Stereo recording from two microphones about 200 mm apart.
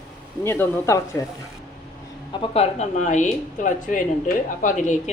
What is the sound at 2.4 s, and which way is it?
Speech, 30° left (ahead or behind).